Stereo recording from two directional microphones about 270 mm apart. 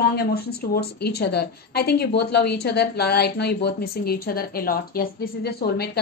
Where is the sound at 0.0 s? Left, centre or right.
Left.